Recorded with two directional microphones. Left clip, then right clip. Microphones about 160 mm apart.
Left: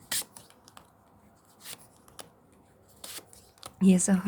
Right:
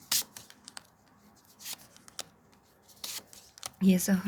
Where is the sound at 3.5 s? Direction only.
20° left (ahead or behind).